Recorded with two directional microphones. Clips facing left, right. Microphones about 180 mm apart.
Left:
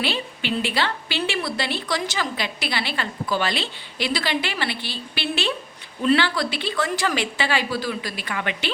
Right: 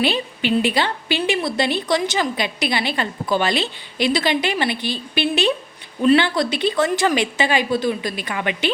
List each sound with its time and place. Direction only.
0.0 s a woman's voice: 15° right (ahead or behind)